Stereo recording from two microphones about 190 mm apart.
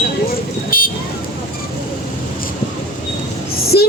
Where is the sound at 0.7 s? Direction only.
50° left (ahead or behind).